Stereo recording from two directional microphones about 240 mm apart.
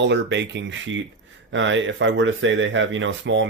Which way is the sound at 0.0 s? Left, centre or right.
Right.